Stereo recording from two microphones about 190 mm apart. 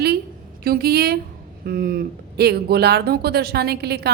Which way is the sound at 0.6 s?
55° right (ahead or behind).